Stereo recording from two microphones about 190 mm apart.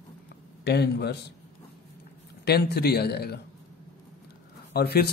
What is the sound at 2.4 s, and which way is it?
A man's voice, 55° left (ahead or behind).